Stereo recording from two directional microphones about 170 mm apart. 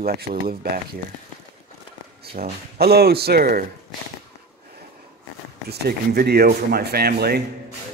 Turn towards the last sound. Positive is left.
turn(degrees=-65)  # may be behind; listen again after turning